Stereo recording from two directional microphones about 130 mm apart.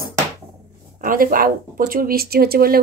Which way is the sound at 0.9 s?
90° right.